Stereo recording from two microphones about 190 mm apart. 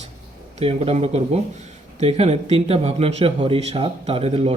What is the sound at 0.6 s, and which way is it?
A man's voice, 30° right (ahead or behind).